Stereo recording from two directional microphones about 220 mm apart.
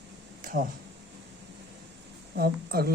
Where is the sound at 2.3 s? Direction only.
45° right (ahead or behind).